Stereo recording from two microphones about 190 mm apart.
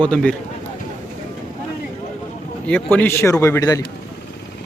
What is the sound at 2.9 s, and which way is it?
Speech, 10° left (ahead or behind).